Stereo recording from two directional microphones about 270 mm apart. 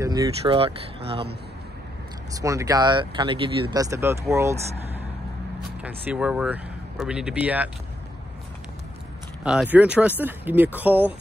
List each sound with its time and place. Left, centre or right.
0.0 s speech: centre
2.3 s speech: centre
9.4 s speech: centre